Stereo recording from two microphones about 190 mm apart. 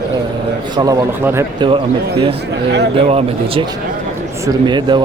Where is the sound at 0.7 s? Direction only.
20° right (ahead or behind).